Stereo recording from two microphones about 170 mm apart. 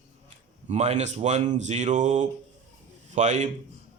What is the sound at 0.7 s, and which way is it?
Speech, 40° right (ahead or behind).